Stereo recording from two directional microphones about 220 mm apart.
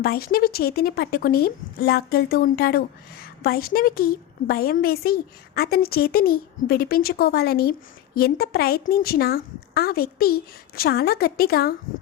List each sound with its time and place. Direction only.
0.0 s speech: 45° left (ahead or behind)